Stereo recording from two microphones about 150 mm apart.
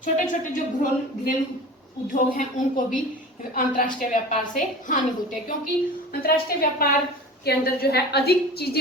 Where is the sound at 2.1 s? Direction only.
65° left (ahead or behind).